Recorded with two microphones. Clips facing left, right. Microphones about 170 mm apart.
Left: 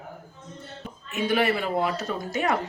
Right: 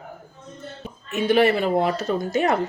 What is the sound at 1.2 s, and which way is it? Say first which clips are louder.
Speech: right 6 dB; 30° right (ahead or behind).